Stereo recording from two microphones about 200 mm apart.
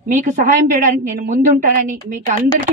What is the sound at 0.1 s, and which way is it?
A woman's voice, 40° right (ahead or behind).